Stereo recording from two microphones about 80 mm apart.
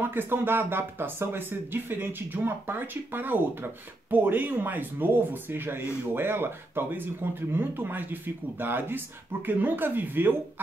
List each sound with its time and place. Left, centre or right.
0.0 s speech: right